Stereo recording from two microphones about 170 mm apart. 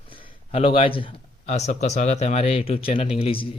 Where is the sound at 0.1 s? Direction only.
35° left (ahead or behind).